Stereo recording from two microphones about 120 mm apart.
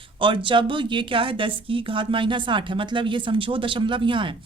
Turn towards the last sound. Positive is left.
turn(degrees=-45)  # may be behind; listen again after turning